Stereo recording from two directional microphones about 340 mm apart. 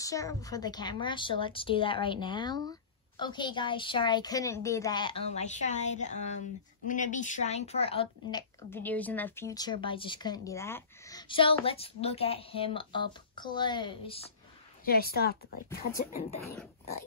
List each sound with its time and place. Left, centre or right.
0.0 s speech: centre
14.9 s speech: left